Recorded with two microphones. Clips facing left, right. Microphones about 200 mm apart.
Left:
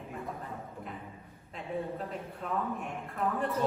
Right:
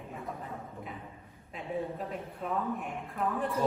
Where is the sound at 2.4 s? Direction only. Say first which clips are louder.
Right 1 dB; centre (ahead or behind).